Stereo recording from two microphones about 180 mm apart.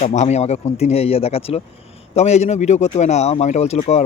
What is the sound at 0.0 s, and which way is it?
Speech, 40° left (ahead or behind).